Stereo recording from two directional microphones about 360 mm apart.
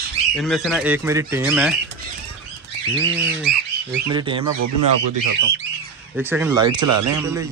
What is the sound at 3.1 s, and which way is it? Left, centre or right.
A man's voice, centre.